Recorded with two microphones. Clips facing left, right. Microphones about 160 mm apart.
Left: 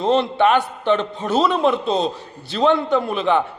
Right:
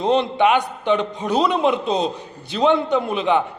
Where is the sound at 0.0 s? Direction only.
15° right (ahead or behind).